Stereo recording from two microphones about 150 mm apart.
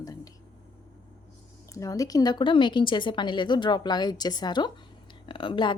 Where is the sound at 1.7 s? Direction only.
20° left (ahead or behind).